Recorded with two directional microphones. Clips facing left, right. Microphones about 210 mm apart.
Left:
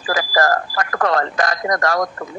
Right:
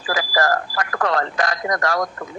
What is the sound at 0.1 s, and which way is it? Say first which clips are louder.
Speech: left 2 dB; 45° left (ahead or behind).